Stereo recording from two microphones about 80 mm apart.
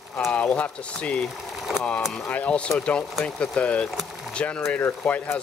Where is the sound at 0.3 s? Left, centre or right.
Centre.